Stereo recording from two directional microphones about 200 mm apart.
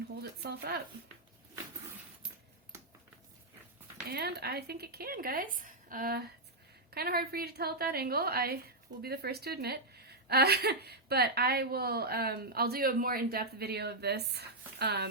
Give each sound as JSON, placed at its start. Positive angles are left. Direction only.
{"t": 0.2, "sound": "a woman's voice", "side_deg": -50}
{"t": 4.1, "sound": "a woman's voice", "side_deg": -55}